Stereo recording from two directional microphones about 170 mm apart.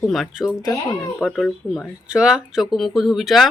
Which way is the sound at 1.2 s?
Centre (ahead or behind).